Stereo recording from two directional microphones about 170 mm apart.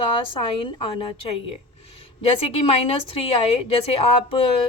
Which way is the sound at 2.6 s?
35° left (ahead or behind).